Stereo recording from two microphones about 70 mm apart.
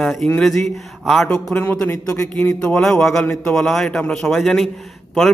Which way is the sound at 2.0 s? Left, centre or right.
Left.